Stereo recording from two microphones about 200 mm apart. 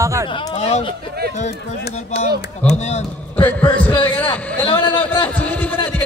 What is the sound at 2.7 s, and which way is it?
Speech, 35° left (ahead or behind).